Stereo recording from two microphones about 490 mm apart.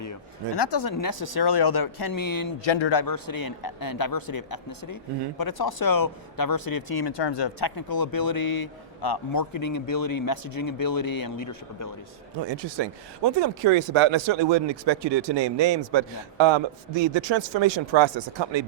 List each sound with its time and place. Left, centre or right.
0.5 s speech: left
2.6 s speech: left
12.4 s speech: right